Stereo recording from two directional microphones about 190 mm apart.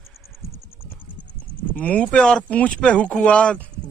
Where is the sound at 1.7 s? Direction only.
5° left (ahead or behind).